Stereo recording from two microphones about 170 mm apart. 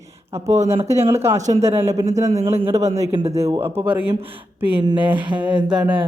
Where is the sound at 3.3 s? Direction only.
15° right (ahead or behind).